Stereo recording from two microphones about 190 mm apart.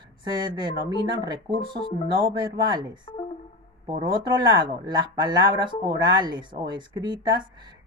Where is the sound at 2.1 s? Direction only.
25° right (ahead or behind).